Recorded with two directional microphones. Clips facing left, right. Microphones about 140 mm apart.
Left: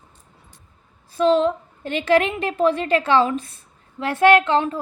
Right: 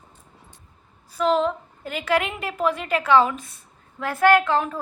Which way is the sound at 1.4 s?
25° left (ahead or behind).